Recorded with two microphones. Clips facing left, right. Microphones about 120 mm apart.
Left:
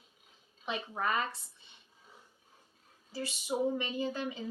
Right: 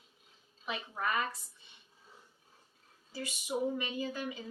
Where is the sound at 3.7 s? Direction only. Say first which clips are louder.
Left 2 dB; 30° left (ahead or behind).